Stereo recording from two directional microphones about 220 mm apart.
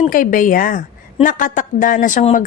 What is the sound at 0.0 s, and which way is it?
A woman's voice, 40° left (ahead or behind).